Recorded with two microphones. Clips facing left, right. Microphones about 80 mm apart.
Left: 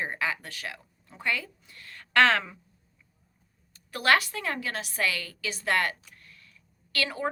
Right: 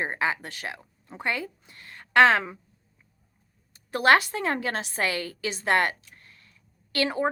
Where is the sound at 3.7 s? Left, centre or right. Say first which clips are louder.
Right 4 dB; right.